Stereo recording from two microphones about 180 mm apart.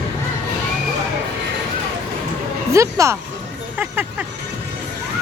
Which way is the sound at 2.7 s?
15° right (ahead or behind).